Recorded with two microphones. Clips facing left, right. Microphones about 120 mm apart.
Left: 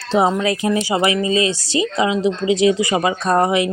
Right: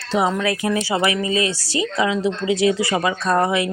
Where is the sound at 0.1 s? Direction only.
25° left (ahead or behind).